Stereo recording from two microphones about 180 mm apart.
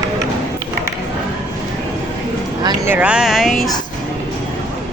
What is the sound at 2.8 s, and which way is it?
Speech, 5° right (ahead or behind).